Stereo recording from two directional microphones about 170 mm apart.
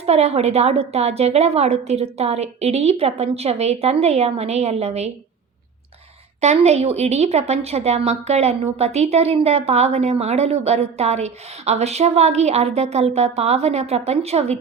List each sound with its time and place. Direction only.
0.0 s a woman's voice: 40° right (ahead or behind)
6.4 s a woman's voice: 40° right (ahead or behind)